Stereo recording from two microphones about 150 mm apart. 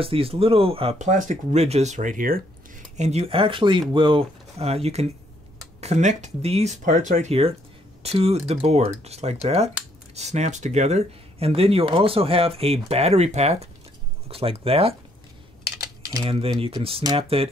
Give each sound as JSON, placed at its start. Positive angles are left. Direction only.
{"t": 0.0, "sound": "speech", "side_deg": -40}
{"t": 0.9, "sound": "speech", "side_deg": -55}
{"t": 3.0, "sound": "speech", "side_deg": -45}
{"t": 16.0, "sound": "typing", "side_deg": -25}
{"t": 16.3, "sound": "speech", "side_deg": -35}